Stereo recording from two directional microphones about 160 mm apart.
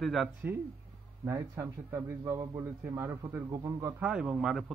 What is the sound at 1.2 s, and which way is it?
A man's voice, 15° right (ahead or behind).